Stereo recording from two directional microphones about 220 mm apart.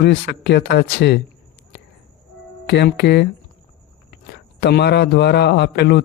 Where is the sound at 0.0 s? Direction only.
50° left (ahead or behind).